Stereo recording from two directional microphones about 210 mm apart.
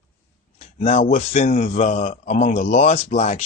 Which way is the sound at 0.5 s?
30° left (ahead or behind).